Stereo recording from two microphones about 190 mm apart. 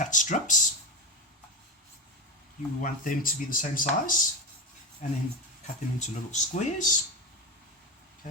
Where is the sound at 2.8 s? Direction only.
45° left (ahead or behind).